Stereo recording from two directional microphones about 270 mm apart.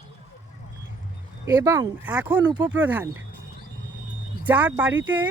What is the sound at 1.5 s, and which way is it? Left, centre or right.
Speech, centre.